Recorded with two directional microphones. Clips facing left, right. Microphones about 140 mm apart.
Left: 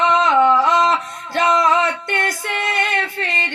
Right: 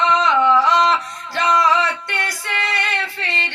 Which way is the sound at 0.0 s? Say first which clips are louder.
Left 2 dB; 50° left (ahead or behind).